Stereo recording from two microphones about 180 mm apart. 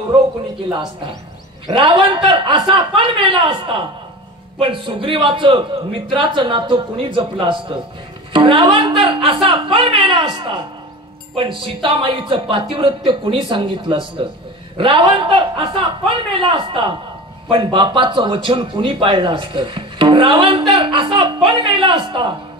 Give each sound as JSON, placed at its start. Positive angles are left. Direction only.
{"t": 0.7, "sound": "a man's voice", "side_deg": -25}